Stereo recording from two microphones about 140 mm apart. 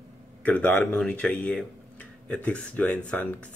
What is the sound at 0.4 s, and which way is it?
Speech, 10° left (ahead or behind).